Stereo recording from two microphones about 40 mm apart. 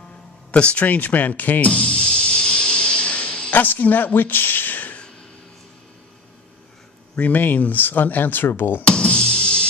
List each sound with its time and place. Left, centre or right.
0.5 s speech: left
0.8 s speech: left
1.7 s music: left
3.5 s speech: left
7.2 s speech: left
8.8 s music: left